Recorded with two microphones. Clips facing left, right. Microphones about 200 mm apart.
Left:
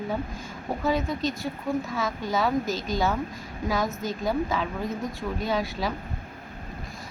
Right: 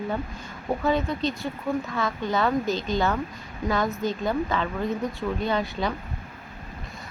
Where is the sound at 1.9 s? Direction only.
5° left (ahead or behind).